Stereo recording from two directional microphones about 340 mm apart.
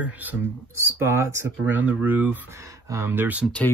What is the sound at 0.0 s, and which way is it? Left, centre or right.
Speech, centre.